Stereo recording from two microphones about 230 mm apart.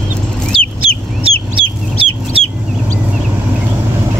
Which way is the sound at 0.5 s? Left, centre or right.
Centre.